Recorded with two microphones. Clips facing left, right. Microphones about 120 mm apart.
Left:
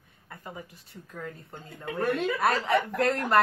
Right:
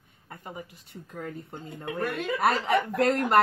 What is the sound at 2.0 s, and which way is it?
Speech, 30° left (ahead or behind).